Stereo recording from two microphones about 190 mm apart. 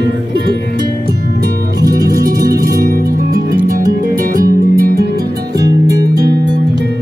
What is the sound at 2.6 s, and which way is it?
Music, 50° right (ahead or behind).